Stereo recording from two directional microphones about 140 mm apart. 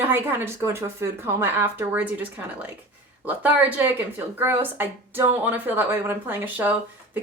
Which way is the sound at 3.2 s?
10° right (ahead or behind).